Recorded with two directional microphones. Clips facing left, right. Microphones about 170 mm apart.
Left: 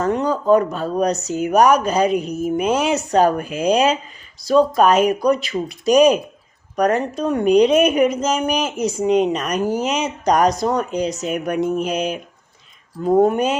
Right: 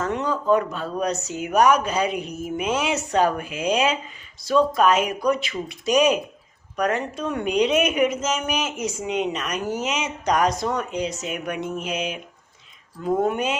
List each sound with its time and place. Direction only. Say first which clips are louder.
0.0 s a woman's voice: left 5 dB; 40° left (ahead or behind)